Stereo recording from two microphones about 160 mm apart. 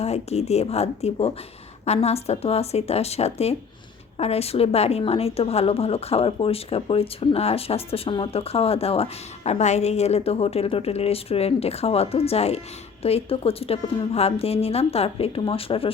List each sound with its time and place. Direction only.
0.0 s a woman's voice: 40° left (ahead or behind)